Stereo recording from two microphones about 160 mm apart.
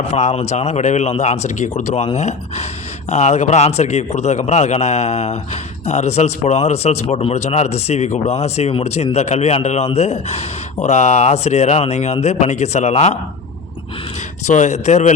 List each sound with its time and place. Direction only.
0.1 s a man's voice: 40° left (ahead or behind)
14.4 s a man's voice: 50° left (ahead or behind)